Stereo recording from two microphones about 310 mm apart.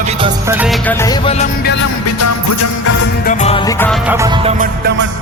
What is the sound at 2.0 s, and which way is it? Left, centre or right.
Music, left.